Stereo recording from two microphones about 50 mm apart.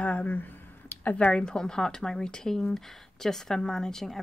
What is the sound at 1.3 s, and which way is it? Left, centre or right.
Speech, centre.